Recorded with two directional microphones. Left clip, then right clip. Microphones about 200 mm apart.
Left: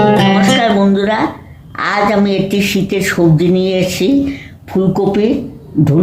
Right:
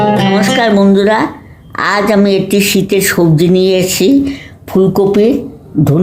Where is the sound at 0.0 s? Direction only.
Centre (ahead or behind).